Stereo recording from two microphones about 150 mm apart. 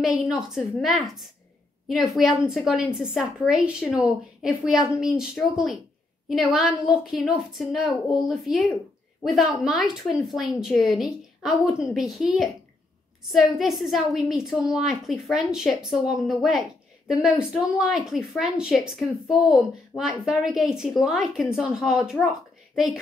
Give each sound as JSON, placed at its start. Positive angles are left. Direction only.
{"t": 0.0, "sound": "a woman's voice", "side_deg": -5}
{"t": 6.9, "sound": "a woman's voice", "side_deg": -5}